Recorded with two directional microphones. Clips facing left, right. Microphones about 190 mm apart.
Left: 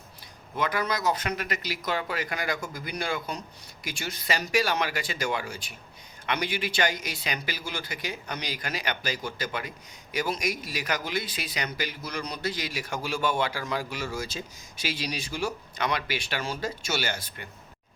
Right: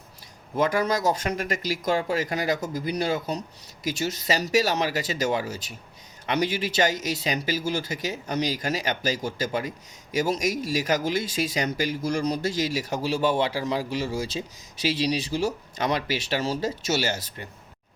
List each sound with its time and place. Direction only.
0.5 s speech: 45° right (ahead or behind)